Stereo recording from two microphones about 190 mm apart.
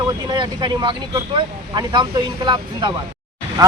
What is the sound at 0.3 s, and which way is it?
Speech, 25° right (ahead or behind).